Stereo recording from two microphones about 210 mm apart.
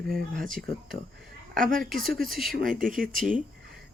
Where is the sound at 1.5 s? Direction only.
40° right (ahead or behind).